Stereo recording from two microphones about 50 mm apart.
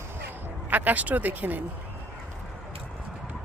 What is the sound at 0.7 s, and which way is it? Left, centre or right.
Speech, right.